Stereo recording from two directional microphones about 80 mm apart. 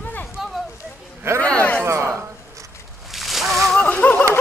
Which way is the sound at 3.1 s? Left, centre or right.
Centre.